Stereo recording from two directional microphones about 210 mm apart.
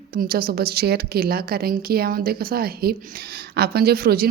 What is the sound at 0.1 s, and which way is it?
A woman's voice, 45° right (ahead or behind).